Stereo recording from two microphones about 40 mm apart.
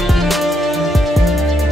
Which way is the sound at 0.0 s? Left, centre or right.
Centre.